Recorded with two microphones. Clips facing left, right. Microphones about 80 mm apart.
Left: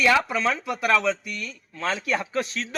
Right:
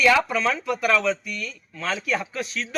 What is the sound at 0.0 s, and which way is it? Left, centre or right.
Speech, centre.